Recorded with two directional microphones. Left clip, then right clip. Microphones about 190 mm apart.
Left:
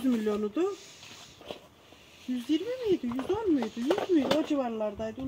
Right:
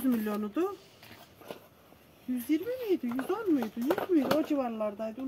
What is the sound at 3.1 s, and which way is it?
Speech, 10° right (ahead or behind).